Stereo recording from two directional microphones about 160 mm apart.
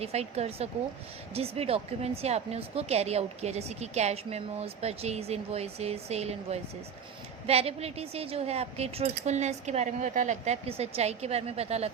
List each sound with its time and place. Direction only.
0.0 s speech: 40° right (ahead or behind)